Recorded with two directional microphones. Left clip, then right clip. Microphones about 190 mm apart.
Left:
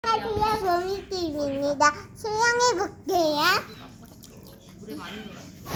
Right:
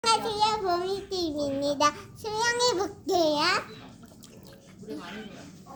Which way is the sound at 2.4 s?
5° right (ahead or behind).